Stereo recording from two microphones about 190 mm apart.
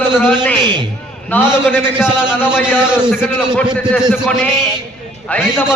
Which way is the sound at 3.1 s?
10° left (ahead or behind).